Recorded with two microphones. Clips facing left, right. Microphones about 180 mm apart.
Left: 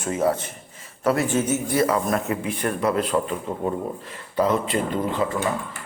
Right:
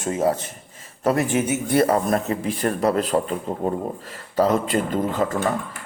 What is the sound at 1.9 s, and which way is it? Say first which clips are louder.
A man's voice: right 2 dB; 35° right (ahead or behind).